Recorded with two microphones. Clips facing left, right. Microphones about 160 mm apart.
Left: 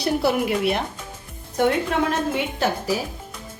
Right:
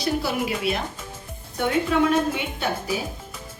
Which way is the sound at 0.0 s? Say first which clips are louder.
Left 4 dB; 60° left (ahead or behind).